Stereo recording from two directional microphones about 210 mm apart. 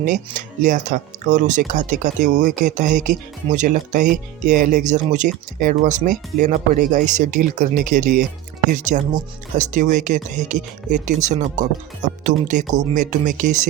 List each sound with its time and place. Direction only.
0.0 s speech: 35° right (ahead or behind)